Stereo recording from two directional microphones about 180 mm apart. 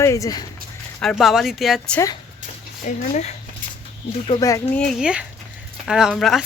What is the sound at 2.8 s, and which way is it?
Speech, 40° left (ahead or behind).